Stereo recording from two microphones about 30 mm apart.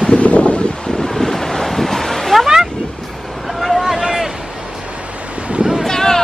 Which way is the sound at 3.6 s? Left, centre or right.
Centre.